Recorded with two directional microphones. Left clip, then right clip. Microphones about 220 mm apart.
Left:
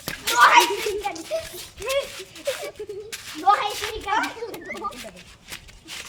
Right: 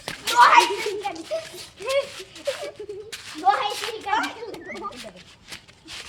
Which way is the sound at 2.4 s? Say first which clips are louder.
Even; centre (ahead or behind).